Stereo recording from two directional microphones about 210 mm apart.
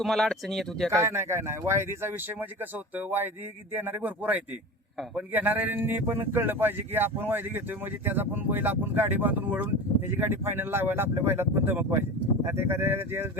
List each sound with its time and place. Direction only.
0.0 s speech: centre (ahead or behind)
0.9 s speech: 15° right (ahead or behind)